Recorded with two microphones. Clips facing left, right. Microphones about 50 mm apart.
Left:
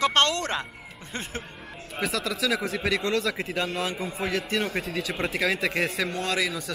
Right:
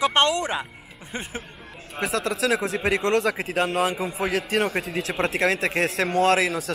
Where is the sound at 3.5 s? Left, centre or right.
Right.